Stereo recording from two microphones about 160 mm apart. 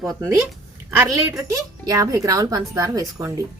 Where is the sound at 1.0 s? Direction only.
20° right (ahead or behind).